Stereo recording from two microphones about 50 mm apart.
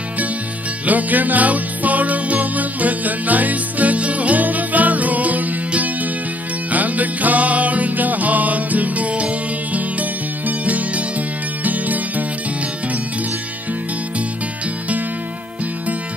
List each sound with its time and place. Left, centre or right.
0.8 s music: right